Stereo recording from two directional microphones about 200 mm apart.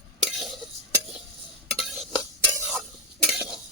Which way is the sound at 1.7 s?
Centre (ahead or behind).